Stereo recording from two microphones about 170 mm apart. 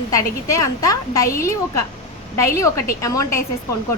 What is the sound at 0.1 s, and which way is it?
A woman's voice, 20° left (ahead or behind).